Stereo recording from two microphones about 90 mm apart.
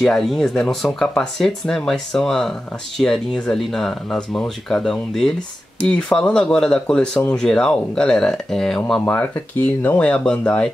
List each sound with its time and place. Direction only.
0.0 s speech: 5° left (ahead or behind)
9.0 s speech: 20° left (ahead or behind)